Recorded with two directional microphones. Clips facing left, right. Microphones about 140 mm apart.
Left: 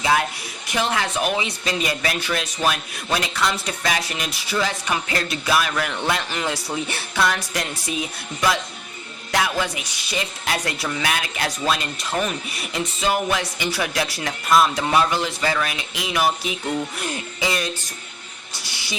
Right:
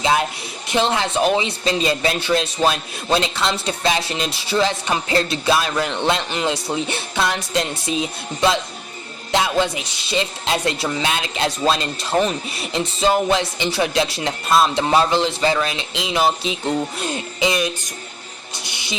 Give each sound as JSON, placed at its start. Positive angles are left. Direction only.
{"t": 0.0, "sound": "a woman's voice", "side_deg": -20}
{"t": 18.5, "sound": "music", "side_deg": -20}